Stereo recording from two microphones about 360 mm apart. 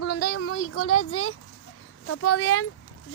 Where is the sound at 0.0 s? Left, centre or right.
Left.